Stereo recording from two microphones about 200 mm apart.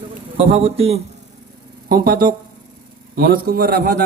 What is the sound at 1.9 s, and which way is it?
A man's voice, 50° right (ahead or behind).